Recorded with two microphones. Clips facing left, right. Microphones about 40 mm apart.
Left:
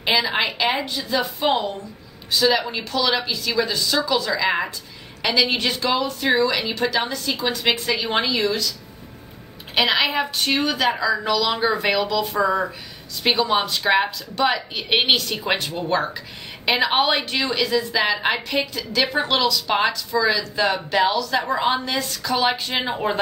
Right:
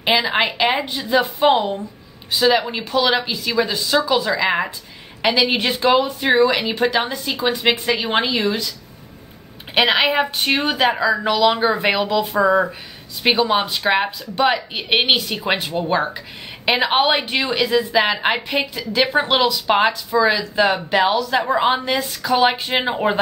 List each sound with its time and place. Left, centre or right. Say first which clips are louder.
0.0 s a woman's voice: right 3 dB; centre
9.8 s a woman's voice: right 3 dB; right
13.2 s a woman's voice: right 3 dB; centre